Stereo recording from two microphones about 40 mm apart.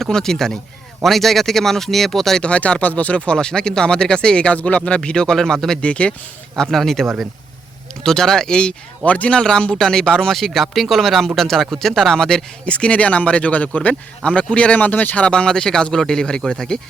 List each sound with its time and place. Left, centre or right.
0.0 s speech: centre
2.4 s speech: left
3.3 s speech: centre
5.8 s speech: left
6.7 s speech: centre
9.0 s speech: left
9.4 s speech: centre
10.3 s speech: centre
11.9 s speech: centre
12.6 s speech: left
15.2 s speech: left